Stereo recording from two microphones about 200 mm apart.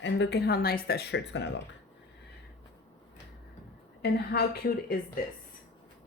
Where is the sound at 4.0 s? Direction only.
50° left (ahead or behind).